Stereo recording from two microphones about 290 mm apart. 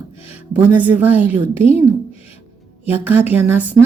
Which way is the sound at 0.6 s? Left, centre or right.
Centre.